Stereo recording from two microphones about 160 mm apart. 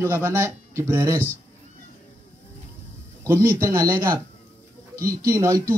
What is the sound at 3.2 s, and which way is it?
A man's voice, 15° right (ahead or behind).